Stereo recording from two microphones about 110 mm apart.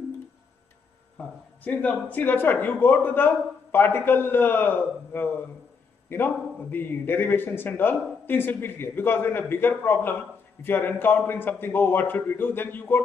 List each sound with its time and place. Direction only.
1.1 s a man's voice: 15° left (ahead or behind)